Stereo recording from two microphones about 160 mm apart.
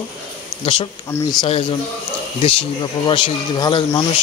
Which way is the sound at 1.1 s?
15° left (ahead or behind).